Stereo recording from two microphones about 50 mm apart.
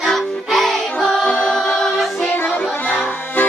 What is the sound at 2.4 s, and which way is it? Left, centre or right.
Music, left.